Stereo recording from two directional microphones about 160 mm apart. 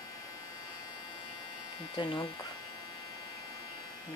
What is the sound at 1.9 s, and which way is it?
Speech, 30° left (ahead or behind).